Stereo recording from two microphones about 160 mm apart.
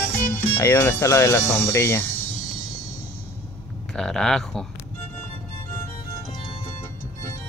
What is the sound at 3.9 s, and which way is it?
Speech, 5° left (ahead or behind).